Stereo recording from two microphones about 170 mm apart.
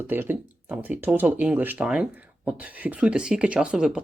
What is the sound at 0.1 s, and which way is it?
Speech, 10° right (ahead or behind).